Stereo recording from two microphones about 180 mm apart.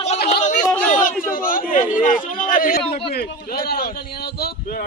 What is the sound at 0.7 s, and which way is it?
Chatter, 10° left (ahead or behind).